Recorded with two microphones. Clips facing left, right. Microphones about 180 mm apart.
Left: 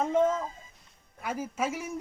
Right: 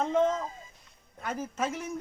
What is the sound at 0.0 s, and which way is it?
Speech, 10° left (ahead or behind).